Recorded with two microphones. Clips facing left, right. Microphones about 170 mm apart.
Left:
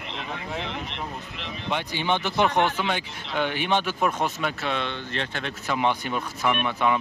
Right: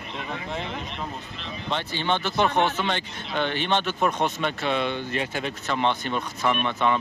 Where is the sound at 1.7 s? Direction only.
15° left (ahead or behind); by 5.5 s 10° right (ahead or behind).